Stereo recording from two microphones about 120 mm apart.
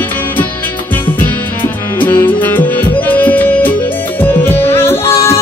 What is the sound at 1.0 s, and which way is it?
Music, 15° left (ahead or behind).